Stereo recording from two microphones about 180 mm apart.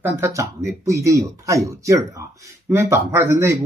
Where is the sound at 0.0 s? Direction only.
15° right (ahead or behind).